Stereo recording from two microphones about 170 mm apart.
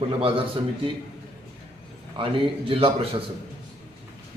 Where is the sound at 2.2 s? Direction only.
30° right (ahead or behind).